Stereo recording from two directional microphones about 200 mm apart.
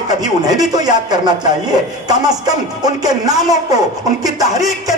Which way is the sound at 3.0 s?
20° right (ahead or behind).